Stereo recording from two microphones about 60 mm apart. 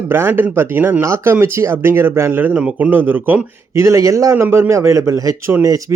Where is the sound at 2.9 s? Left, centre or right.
Right.